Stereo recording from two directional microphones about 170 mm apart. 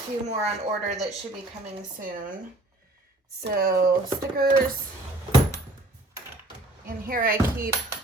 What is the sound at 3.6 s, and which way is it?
Speech, 60° right (ahead or behind).